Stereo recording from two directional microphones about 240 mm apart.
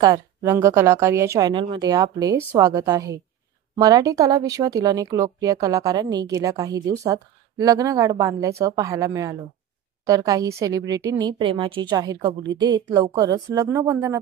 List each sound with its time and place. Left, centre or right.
0.0 s speech: centre